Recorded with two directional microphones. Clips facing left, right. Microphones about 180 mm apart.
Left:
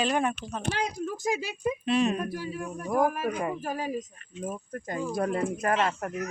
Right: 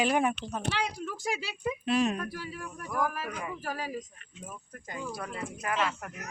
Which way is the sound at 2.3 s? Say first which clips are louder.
Left 6 dB; 20° left (ahead or behind).